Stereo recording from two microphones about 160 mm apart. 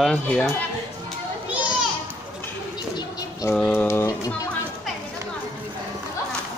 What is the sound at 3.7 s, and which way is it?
Speech, 15° left (ahead or behind).